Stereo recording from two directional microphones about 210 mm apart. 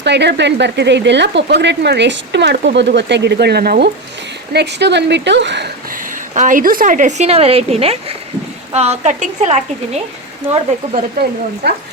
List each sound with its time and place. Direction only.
0.0 s speech: 55° right (ahead or behind)
6.3 s a woman's voice: 40° right (ahead or behind)
10.5 s speech: 45° right (ahead or behind)